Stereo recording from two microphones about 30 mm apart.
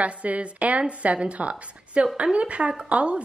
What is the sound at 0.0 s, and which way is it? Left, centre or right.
A woman's voice, right.